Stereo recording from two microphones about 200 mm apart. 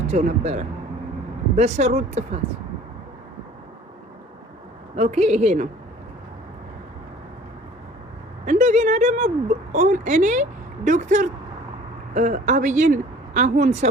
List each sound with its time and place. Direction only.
0.1 s speech: 35° right (ahead or behind)
4.9 s speech: 35° right (ahead or behind)
8.4 s speech: 35° right (ahead or behind)